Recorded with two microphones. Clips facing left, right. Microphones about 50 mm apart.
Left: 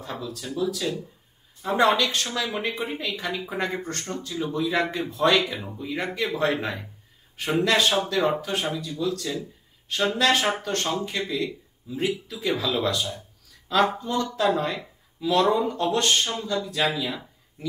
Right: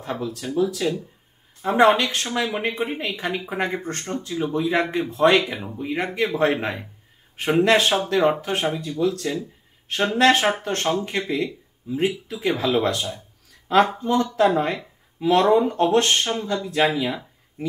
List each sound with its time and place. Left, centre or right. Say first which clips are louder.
0.0 s speech: right 5 dB; right
12.3 s speech: right 4 dB; right